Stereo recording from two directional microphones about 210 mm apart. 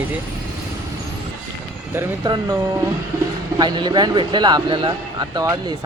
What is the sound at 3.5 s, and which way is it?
A man's voice, 20° right (ahead or behind).